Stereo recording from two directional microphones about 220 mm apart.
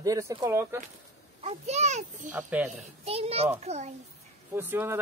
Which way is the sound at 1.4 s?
30° right (ahead or behind).